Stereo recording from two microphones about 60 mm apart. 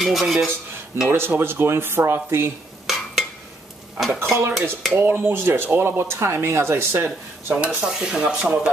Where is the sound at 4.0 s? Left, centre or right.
Centre.